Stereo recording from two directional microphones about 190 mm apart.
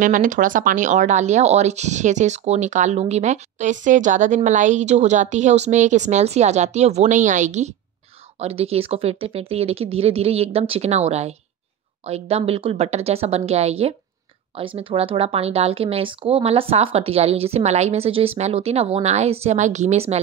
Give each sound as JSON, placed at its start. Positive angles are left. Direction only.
{"t": 0.0, "sound": "speech", "side_deg": -45}